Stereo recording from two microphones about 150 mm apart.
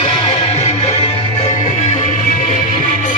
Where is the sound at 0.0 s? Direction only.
40° left (ahead or behind).